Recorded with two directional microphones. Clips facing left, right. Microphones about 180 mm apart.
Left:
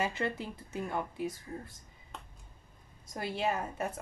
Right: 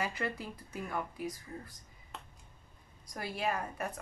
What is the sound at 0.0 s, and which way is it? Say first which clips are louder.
Speech: left 3 dB; 25° left (ahead or behind).